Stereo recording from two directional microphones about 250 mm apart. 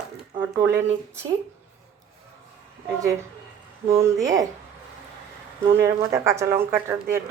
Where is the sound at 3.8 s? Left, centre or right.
Centre.